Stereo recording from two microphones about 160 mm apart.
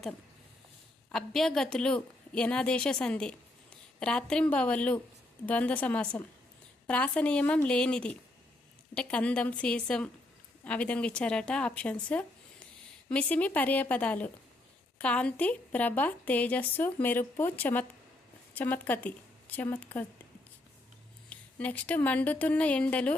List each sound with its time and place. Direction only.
1.1 s a woman's voice: 5° left (ahead or behind)
21.2 s speech: 10° left (ahead or behind)